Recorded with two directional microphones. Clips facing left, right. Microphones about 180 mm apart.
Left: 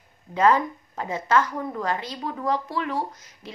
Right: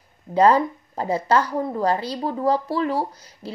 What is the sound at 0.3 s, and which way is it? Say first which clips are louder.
Speech: right 4 dB; 35° right (ahead or behind).